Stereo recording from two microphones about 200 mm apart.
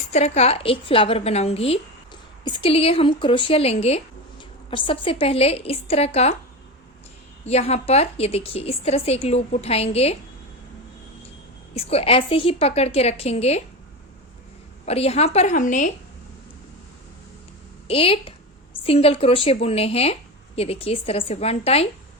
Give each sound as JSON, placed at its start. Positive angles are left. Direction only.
{"t": 0.1, "sound": "speech", "side_deg": 35}
{"t": 7.4, "sound": "a woman's voice", "side_deg": 30}
{"t": 11.7, "sound": "a woman's voice", "side_deg": 30}
{"t": 14.8, "sound": "a woman's voice", "side_deg": 30}
{"t": 17.8, "sound": "speech", "side_deg": 30}